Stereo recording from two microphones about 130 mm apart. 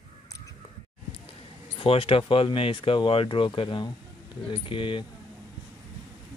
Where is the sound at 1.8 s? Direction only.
45° left (ahead or behind).